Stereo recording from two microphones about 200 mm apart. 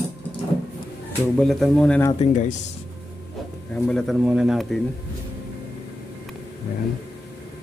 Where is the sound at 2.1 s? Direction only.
35° left (ahead or behind).